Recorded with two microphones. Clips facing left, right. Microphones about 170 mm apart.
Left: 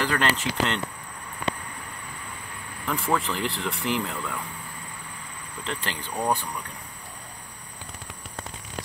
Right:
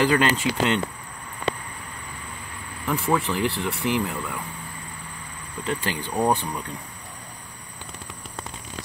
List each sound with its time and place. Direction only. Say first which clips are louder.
0.0 s speech: right 5 dB; 15° right (ahead or behind)
2.9 s speech: right 3 dB; 5° right (ahead or behind)
5.6 s speech: right 5 dB; 10° right (ahead or behind)